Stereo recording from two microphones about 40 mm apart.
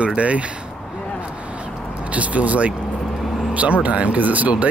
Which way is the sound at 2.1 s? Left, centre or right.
Right.